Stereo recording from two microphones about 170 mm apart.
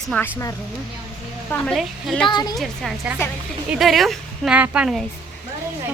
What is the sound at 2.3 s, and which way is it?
Speech, 25° left (ahead or behind).